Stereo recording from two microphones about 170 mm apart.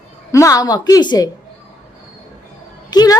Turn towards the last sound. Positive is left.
turn(degrees=25)  # may be behind; listen again after turning